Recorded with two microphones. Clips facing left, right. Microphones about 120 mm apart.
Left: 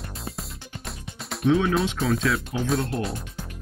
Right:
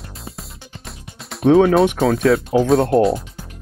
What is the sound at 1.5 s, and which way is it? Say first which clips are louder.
Speech: right 9 dB; 50° right (ahead or behind).